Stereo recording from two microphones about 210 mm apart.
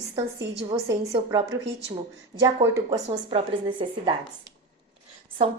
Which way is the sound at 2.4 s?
15° right (ahead or behind).